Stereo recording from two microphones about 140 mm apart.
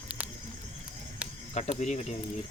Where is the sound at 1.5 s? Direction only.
50° left (ahead or behind).